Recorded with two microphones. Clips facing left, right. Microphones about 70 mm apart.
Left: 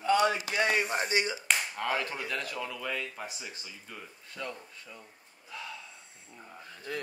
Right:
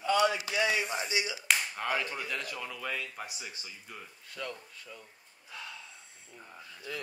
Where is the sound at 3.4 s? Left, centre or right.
Centre.